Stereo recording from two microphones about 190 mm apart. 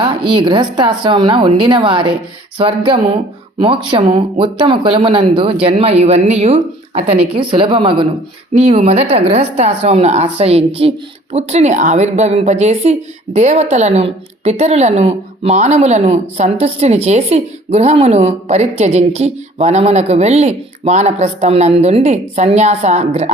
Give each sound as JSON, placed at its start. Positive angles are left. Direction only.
{"t": 0.0, "sound": "a woman's voice", "side_deg": -25}